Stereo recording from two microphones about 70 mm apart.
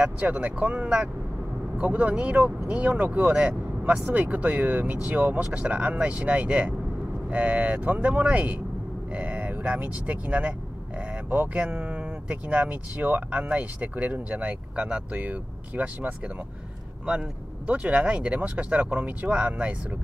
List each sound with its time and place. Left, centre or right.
0.0 s speech: right
17.6 s speech: centre